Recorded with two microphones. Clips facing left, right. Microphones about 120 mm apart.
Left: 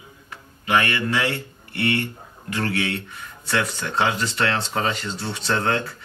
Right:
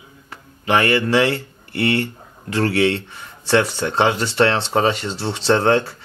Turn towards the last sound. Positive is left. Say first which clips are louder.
# right 7 dB
turn(degrees=-30)  # may be behind; listen again after turning